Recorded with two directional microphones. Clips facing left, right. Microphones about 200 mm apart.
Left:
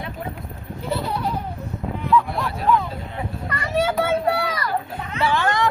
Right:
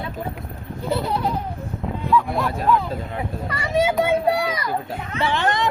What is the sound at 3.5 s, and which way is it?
A child's voice, 15° right (ahead or behind).